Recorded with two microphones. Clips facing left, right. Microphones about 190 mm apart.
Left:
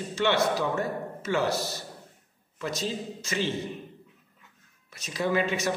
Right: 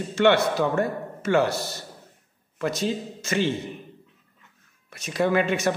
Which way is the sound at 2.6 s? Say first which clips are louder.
Right 5 dB; 55° right (ahead or behind).